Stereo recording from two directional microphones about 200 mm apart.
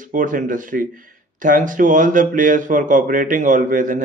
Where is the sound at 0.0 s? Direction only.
40° right (ahead or behind).